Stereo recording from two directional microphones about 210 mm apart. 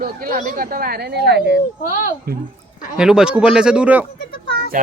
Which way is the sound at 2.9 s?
5° right (ahead or behind).